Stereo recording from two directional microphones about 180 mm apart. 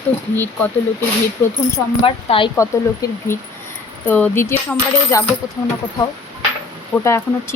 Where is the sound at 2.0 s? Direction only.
30° left (ahead or behind).